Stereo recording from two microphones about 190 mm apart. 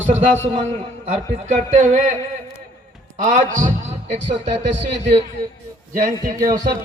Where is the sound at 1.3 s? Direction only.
40° right (ahead or behind).